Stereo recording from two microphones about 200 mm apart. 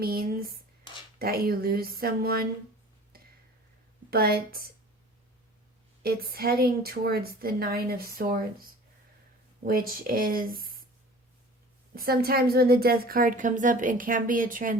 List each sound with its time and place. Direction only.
0.0 s a woman's voice: 50° right (ahead or behind)
4.1 s a woman's voice: 50° right (ahead or behind)
6.0 s a woman's voice: 50° right (ahead or behind)
9.6 s a woman's voice: 45° right (ahead or behind)
11.9 s a woman's voice: 50° right (ahead or behind)